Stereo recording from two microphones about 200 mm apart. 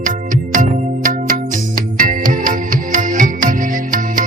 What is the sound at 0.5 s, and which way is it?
Music, 40° right (ahead or behind).